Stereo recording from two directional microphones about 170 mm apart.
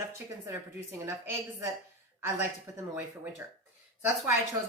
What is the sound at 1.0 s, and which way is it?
A woman's voice, 15° right (ahead or behind).